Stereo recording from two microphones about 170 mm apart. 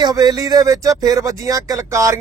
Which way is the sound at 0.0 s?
25° right (ahead or behind).